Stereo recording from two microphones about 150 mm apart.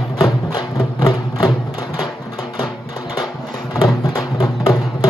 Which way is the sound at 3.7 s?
25° left (ahead or behind).